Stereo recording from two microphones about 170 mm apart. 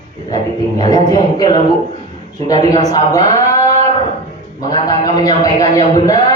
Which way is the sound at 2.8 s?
20° left (ahead or behind).